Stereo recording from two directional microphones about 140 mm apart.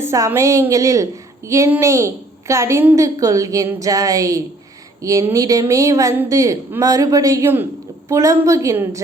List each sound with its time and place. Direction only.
0.0 s a woman's voice: 20° right (ahead or behind)